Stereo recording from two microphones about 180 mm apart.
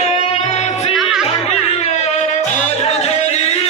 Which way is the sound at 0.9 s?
Centre (ahead or behind).